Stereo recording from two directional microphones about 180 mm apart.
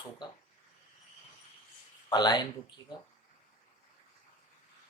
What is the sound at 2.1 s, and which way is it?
Speech, 25° left (ahead or behind).